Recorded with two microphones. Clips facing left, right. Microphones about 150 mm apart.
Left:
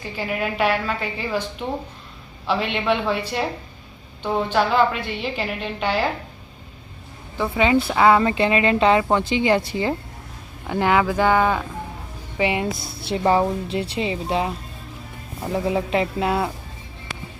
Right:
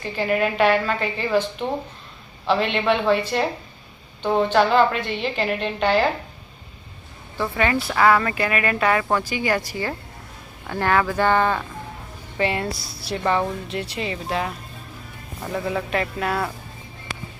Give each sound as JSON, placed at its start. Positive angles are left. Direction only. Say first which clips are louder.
{"t": 0.0, "sound": "a woman's voice", "louder": "right 4 dB", "side_deg": 5}
{"t": 2.5, "sound": "a woman's voice", "louder": "right 2 dB", "side_deg": 10}
{"t": 7.3, "sound": "a woman's voice", "louder": "left 3 dB", "side_deg": 15}
{"t": 12.7, "sound": "speech", "louder": "left 3 dB", "side_deg": 55}
{"t": 13.0, "sound": "speech", "louder": "left 4 dB", "side_deg": 25}
{"t": 15.5, "sound": "speech", "louder": "left 3 dB", "side_deg": 30}